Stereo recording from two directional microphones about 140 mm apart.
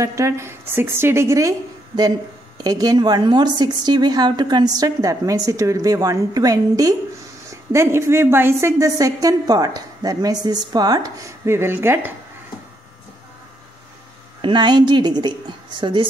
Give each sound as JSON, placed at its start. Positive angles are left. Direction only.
{"t": 0.0, "sound": "a woman's voice", "side_deg": -20}
{"t": 14.4, "sound": "a woman's voice", "side_deg": -35}